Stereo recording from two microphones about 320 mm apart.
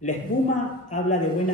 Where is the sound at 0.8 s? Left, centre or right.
Left.